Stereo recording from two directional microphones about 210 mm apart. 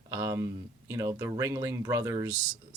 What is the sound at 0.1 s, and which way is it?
Speech, 15° right (ahead or behind).